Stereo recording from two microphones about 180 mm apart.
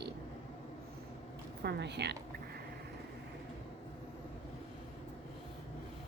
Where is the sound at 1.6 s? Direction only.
70° right (ahead or behind).